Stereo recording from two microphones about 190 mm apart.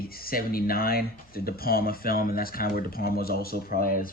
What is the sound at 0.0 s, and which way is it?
Speech, 50° left (ahead or behind).